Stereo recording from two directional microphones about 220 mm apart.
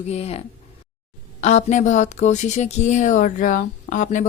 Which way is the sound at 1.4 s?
30° left (ahead or behind).